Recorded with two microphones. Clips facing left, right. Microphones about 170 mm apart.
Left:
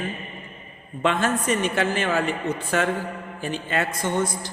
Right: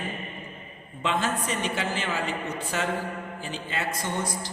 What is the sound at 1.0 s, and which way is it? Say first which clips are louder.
A man's voice: left 5 dB; 55° left (ahead or behind).